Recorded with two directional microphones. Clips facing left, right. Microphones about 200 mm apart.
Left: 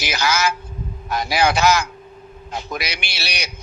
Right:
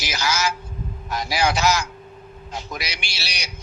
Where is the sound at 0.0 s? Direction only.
60° left (ahead or behind).